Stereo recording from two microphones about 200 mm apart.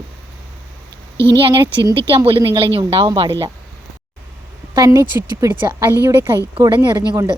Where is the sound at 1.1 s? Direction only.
60° right (ahead or behind).